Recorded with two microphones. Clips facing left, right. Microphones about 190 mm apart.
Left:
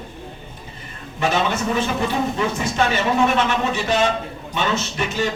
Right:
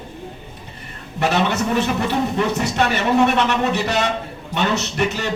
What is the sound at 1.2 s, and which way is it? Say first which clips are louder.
A man's voice: right 2 dB; 70° right (ahead or behind).